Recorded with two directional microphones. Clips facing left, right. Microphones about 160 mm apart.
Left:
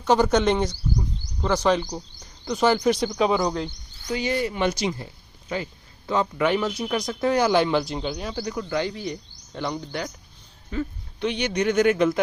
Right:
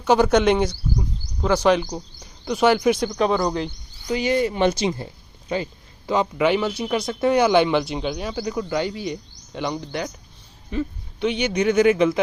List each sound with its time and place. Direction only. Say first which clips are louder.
0.0 s speech: right 3 dB; 5° right (ahead or behind)
3.1 s speech: right 1 dB; 5° left (ahead or behind)
4.0 s speech: right 4 dB; 20° right (ahead or behind)
6.1 s speech: right 3 dB; 10° right (ahead or behind)
11.3 s speech: right 3 dB; 5° right (ahead or behind)